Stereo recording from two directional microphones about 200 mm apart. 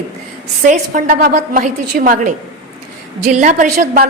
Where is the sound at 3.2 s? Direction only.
40° right (ahead or behind).